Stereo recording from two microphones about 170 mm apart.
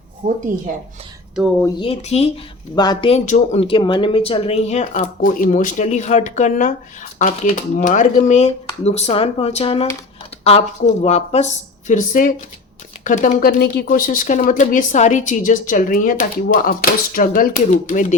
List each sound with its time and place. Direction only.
0.2 s a woman's voice: 50° right (ahead or behind)
1.8 s speech: 35° left (ahead or behind)
2.7 s speech: 25° left (ahead or behind)
3.1 s a woman's voice: 40° left (ahead or behind)
13.6 s a woman's voice: 60° left (ahead or behind)